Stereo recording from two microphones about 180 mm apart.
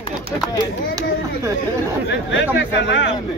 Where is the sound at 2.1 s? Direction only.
90° left.